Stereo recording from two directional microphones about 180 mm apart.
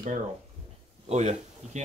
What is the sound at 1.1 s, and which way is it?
Speech, 40° right (ahead or behind).